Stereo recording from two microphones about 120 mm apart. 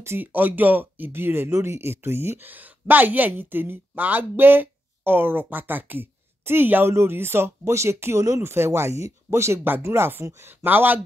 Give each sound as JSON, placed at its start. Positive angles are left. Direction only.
{"t": 0.0, "sound": "speech", "side_deg": -15}